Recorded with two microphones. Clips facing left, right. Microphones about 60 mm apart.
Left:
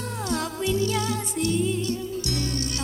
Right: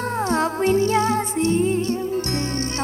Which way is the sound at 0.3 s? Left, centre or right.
Right.